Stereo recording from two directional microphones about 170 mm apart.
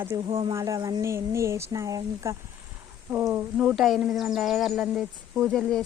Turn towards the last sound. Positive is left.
turn(degrees=5)  # may be behind; listen again after turning